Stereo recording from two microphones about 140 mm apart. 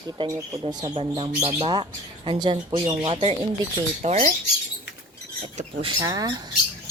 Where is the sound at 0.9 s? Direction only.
45° right (ahead or behind).